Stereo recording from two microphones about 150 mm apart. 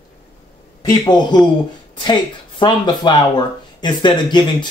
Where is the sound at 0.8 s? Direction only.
30° left (ahead or behind).